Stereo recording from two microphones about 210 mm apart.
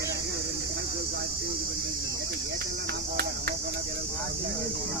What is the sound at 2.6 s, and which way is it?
Cricket, 50° right (ahead or behind).